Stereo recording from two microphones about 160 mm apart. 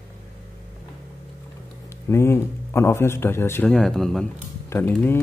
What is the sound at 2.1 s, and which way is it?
A man's voice, 15° left (ahead or behind).